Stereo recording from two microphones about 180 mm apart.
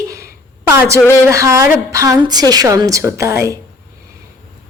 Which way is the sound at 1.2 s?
15° right (ahead or behind).